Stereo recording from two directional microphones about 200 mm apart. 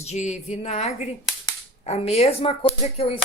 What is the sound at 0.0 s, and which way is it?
Speech, 35° left (ahead or behind).